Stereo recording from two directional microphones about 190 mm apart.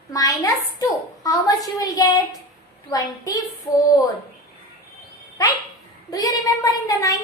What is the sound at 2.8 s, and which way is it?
Speech, 20° left (ahead or behind).